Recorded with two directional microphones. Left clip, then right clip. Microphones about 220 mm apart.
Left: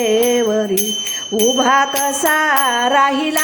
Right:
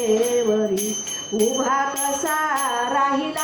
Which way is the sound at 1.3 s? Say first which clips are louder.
Left 7 dB; 50° left (ahead or behind).